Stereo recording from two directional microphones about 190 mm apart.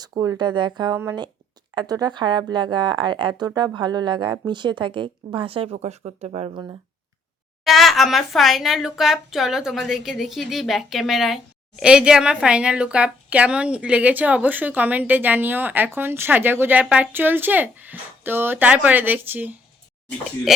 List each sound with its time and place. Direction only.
0.0 s a woman's voice: 20° right (ahead or behind)
7.6 s a woman's voice: centre (ahead or behind)